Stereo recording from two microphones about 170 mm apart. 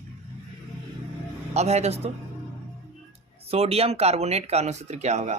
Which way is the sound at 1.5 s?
40° right (ahead or behind).